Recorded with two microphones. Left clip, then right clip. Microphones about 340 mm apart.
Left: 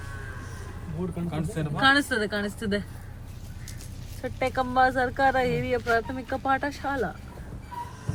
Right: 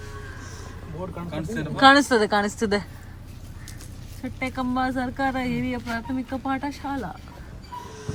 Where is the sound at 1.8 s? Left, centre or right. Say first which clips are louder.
Right 6 dB; centre.